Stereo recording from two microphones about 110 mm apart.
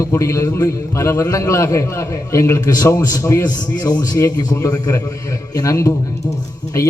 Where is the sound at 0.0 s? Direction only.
30° left (ahead or behind).